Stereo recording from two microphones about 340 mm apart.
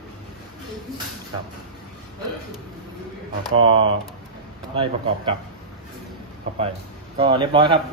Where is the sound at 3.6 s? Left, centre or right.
Centre.